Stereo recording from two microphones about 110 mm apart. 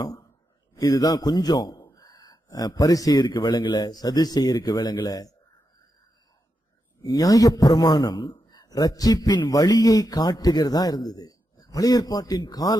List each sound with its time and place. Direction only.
0.0 s a sound: 35° left (ahead or behind)
0.7 s a man's voice: 35° left (ahead or behind)
7.0 s speech: 35° left (ahead or behind)